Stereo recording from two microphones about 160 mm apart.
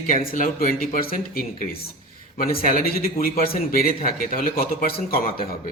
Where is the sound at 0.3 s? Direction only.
60° left (ahead or behind).